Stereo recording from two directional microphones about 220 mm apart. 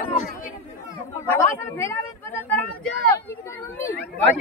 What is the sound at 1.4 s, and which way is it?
Speech, 10° left (ahead or behind).